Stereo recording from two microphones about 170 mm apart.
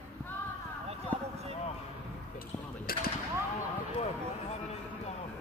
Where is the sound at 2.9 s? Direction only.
60° left (ahead or behind).